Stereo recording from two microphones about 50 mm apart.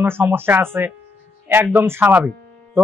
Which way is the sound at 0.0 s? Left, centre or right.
Right.